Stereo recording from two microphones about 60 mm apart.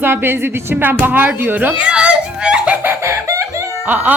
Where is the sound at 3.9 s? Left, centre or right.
Right.